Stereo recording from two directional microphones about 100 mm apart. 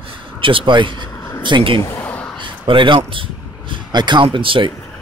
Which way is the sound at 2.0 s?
15° left (ahead or behind).